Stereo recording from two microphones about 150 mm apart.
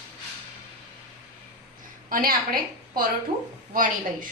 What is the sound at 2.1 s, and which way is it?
A woman's voice, 70° right (ahead or behind).